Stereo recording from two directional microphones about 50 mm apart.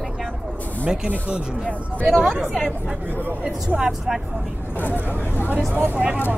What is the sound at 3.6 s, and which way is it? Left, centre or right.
Speech, centre.